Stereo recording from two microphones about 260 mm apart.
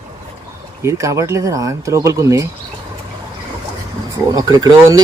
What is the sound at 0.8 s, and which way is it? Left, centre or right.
Speech, centre.